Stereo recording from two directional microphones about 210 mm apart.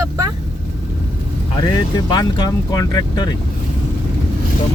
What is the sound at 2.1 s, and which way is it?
Speech, 20° left (ahead or behind).